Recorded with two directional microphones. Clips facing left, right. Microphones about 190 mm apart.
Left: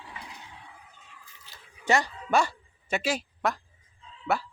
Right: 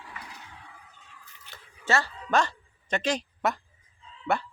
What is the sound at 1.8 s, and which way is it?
Music, 15° left (ahead or behind).